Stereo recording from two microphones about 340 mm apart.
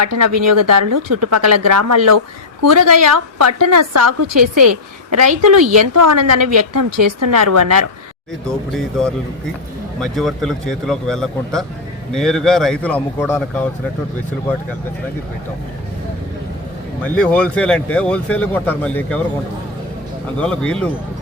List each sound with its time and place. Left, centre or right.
0.0 s a woman's voice: right
8.4 s speech: centre
17.0 s speech: centre
20.4 s speech: centre